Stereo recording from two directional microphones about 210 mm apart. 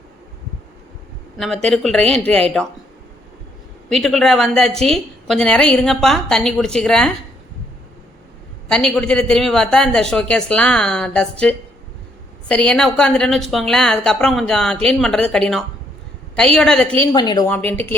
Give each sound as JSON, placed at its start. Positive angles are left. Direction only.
{"t": 1.4, "sound": "a woman's voice", "side_deg": 0}
{"t": 3.8, "sound": "a woman's voice", "side_deg": 0}
{"t": 8.7, "sound": "a woman's voice", "side_deg": 5}
{"t": 17.1, "sound": "a woman's voice", "side_deg": 20}
{"t": 17.5, "sound": "speech", "side_deg": 10}